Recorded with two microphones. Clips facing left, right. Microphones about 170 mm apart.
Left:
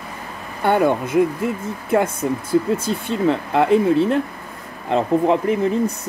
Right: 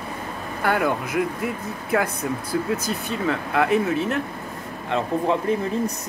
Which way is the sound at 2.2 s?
25° left (ahead or behind).